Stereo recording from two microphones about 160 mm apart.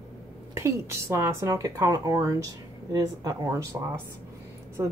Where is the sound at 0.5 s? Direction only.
15° right (ahead or behind).